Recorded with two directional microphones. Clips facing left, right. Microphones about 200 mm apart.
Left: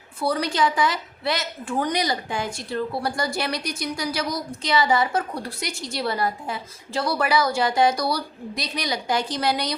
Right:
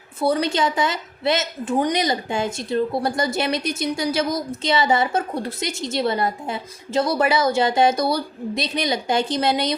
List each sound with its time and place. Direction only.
0.2 s a woman's voice: 25° right (ahead or behind)